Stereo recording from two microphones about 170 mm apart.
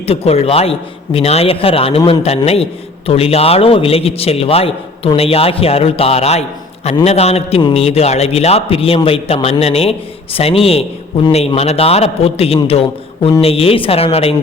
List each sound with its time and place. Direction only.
0.0 s a man's voice: 35° left (ahead or behind)